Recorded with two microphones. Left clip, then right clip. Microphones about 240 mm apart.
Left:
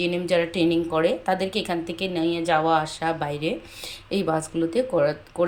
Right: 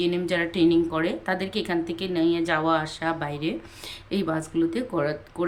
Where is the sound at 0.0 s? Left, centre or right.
Centre.